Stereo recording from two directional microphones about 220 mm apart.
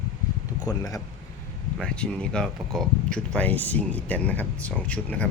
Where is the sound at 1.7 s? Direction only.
5° left (ahead or behind).